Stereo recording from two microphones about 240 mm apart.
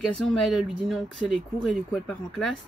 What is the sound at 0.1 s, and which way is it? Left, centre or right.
Speech, centre.